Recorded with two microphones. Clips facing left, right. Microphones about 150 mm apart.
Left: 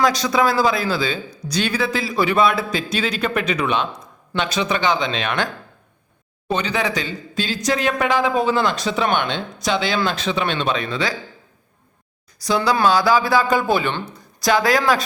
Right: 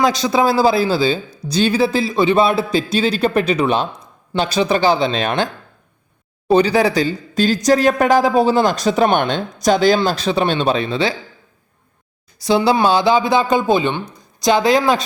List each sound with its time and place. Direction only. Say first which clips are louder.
0.0 s speech: right 2 dB; 25° right (ahead or behind)
6.5 s speech: right 8 dB; 35° right (ahead or behind)
12.4 s speech: right 4 dB; 25° right (ahead or behind)